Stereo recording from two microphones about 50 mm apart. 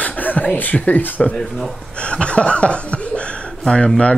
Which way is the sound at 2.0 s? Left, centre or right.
Left.